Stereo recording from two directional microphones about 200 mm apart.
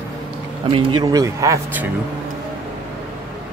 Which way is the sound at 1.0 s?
15° right (ahead or behind).